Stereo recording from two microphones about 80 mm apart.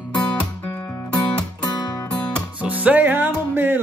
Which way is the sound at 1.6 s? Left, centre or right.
Left.